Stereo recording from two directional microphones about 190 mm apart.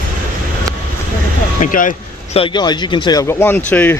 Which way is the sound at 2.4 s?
25° left (ahead or behind).